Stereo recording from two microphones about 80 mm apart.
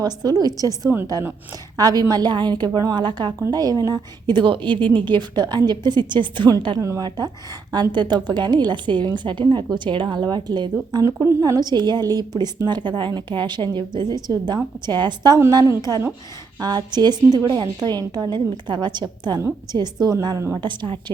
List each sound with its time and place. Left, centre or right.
0.0 s a woman's voice: right
3.5 s a woman's voice: right
6.7 s a woman's voice: right
7.7 s a woman's voice: right
11.0 s a woman's voice: right
11.3 s a woman's voice: right
15.8 s a woman's voice: right
20.6 s a woman's voice: right